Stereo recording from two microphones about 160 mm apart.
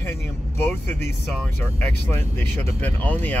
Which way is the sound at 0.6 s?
15° left (ahead or behind).